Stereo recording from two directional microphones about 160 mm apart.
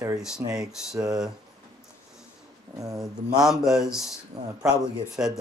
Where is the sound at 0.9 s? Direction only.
25° right (ahead or behind).